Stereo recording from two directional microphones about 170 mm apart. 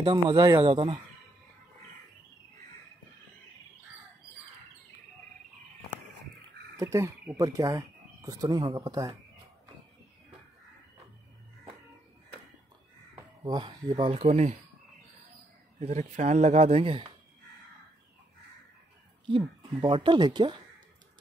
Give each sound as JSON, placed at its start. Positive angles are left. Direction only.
{"t": 0.0, "sound": "speech", "side_deg": -30}
{"t": 6.8, "sound": "a woman's voice", "side_deg": -15}
{"t": 13.1, "sound": "speech", "side_deg": -25}
{"t": 15.8, "sound": "speech", "side_deg": -40}
{"t": 19.2, "sound": "a woman's voice", "side_deg": -30}